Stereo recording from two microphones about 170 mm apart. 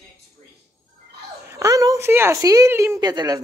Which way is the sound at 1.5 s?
20° right (ahead or behind).